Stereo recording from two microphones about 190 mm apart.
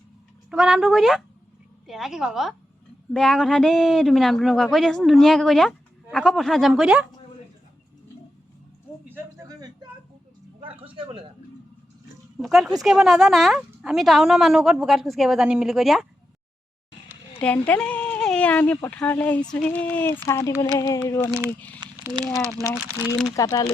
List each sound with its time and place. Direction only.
0.5 s a man's voice: 5° right (ahead or behind)
9.1 s a sound: 15° right (ahead or behind)
10.9 s speech: 25° right (ahead or behind)
12.4 s a man's voice: centre (ahead or behind)
17.4 s speech: 5° left (ahead or behind)
21.2 s speech: 15° right (ahead or behind)
21.8 s a sound: 20° right (ahead or behind)
22.7 s a man's voice: 5° right (ahead or behind)
23.2 s speech: 15° left (ahead or behind)